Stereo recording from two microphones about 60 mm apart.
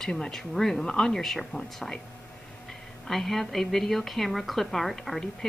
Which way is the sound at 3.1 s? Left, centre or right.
Centre.